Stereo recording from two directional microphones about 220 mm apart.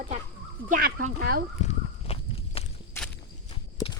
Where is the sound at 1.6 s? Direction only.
25° left (ahead or behind).